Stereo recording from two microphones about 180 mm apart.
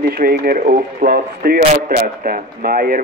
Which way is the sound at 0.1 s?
55° right (ahead or behind).